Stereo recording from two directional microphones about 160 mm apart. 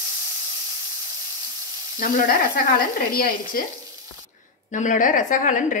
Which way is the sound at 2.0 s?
65° left (ahead or behind).